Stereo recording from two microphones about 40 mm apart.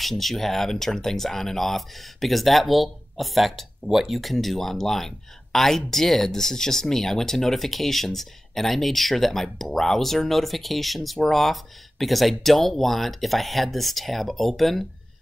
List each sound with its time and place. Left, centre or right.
0.0 s speech: centre